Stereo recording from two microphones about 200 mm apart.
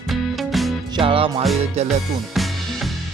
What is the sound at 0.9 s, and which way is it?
Music, 25° right (ahead or behind).